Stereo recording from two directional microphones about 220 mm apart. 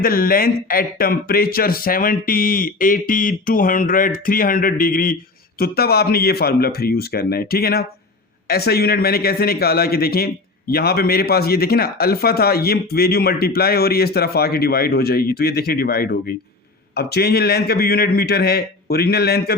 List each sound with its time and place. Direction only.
0.0 s speech: 40° left (ahead or behind)